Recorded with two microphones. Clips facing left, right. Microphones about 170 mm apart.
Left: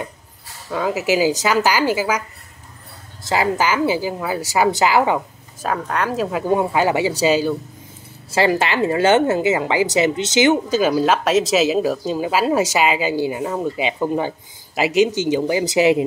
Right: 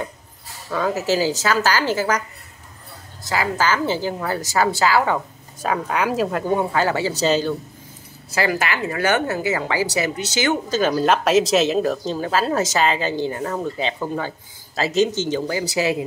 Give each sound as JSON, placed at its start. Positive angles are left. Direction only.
{"t": 0.7, "sound": "speech", "side_deg": 10}
{"t": 3.3, "sound": "speech", "side_deg": 20}
{"t": 5.6, "sound": "speech", "side_deg": 0}
{"t": 6.4, "sound": "speech", "side_deg": 15}
{"t": 8.3, "sound": "a woman's voice", "side_deg": 25}
{"t": 10.8, "sound": "speech", "side_deg": 5}